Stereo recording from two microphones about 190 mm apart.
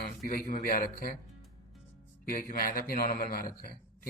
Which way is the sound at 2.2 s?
45° left (ahead or behind).